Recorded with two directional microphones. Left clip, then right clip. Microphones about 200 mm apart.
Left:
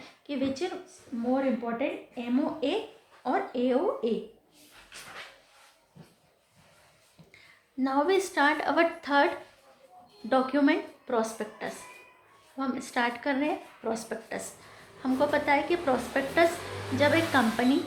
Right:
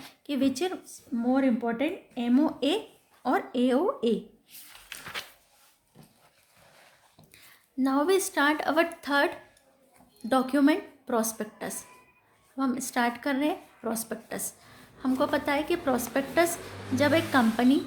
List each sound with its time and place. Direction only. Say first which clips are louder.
0.0 s a sound: right 3 dB; 45° right (ahead or behind)
1.3 s speech: right 2 dB; 50° right (ahead or behind)
7.3 s a woman's voice: right 2 dB; 40° right (ahead or behind)